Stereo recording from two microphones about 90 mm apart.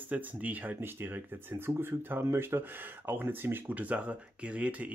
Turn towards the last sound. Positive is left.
turn(degrees=-15)  # may be behind; listen again after turning